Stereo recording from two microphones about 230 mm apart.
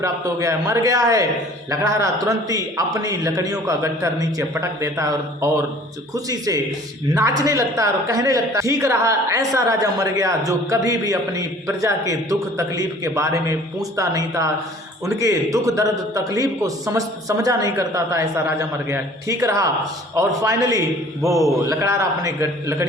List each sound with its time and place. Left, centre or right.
0.0 s a man's voice: centre